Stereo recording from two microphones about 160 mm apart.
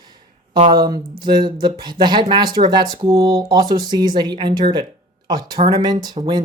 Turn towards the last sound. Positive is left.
turn(degrees=-30)  # may be behind; listen again after turning